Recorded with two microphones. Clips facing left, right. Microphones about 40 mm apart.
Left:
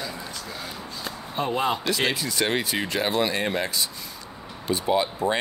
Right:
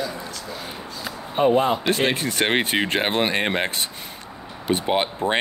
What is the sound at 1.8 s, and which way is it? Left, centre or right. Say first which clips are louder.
Speech: right 4 dB; right.